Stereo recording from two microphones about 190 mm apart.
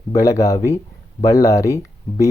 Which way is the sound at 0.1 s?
15° left (ahead or behind).